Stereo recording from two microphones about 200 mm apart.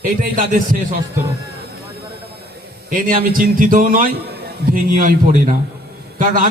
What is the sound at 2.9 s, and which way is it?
A man's voice, 45° right (ahead or behind).